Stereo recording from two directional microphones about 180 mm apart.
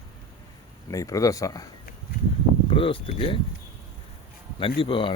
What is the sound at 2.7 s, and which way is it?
Speech, 30° left (ahead or behind).